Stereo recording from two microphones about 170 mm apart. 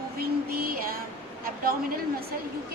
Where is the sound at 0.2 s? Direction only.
60° right (ahead or behind).